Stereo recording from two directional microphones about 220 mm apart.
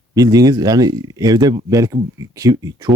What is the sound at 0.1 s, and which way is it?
Speech, 15° right (ahead or behind).